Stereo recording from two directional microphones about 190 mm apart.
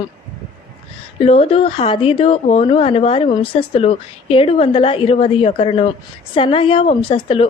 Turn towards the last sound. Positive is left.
turn(degrees=30)  # may be behind; listen again after turning